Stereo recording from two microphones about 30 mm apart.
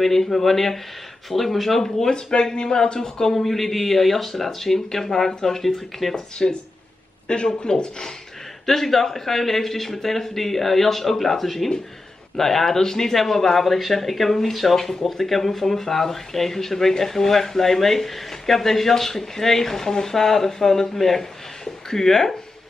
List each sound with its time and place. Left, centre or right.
0.0 s speech: centre
2.0 s speech: left; by 4.7 s centre
4.7 s speech: centre
6.1 s speech: left
8.6 s speech: centre